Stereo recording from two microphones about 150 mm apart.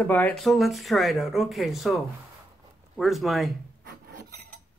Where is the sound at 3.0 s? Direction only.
Centre (ahead or behind).